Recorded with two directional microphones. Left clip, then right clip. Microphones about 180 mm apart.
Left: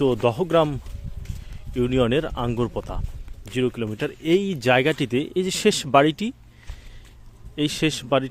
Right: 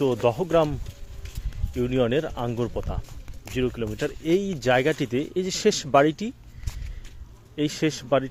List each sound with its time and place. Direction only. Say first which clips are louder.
0.0 s speech: left 2 dB; 50° left (ahead or behind)
7.5 s a man's voice: left 2 dB; 40° left (ahead or behind)